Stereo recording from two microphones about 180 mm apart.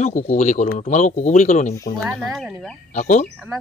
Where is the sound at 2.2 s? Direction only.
Centre (ahead or behind).